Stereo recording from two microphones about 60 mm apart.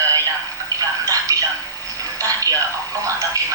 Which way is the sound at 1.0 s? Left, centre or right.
Right.